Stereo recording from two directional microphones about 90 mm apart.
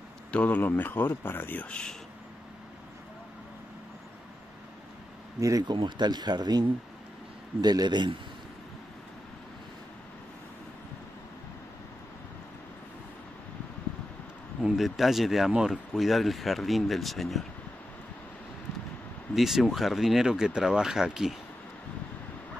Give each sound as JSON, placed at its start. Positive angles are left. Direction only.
{"t": 0.3, "sound": "speech", "side_deg": 15}
{"t": 5.4, "sound": "speech", "side_deg": -40}
{"t": 5.7, "sound": "speech", "side_deg": -60}
{"t": 7.6, "sound": "speech", "side_deg": -50}
{"t": 14.6, "sound": "speech", "side_deg": 0}
{"t": 19.3, "sound": "speech", "side_deg": -5}